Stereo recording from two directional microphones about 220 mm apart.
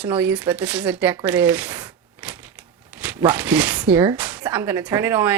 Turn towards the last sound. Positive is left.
turn(degrees=-10)  # may be behind; listen again after turning